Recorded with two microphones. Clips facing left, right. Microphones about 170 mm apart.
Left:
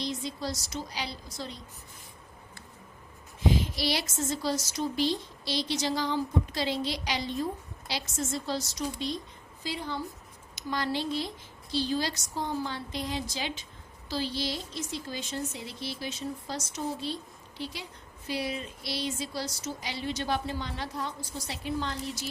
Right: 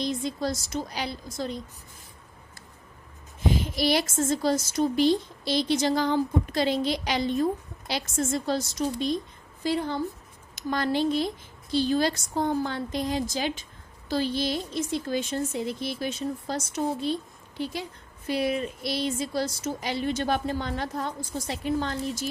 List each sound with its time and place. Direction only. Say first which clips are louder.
0.0 s a woman's voice: right 5 dB; 50° right (ahead or behind)
3.8 s a woman's voice: right 6 dB; 50° right (ahead or behind)